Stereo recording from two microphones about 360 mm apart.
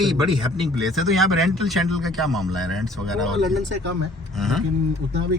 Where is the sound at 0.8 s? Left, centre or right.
Centre.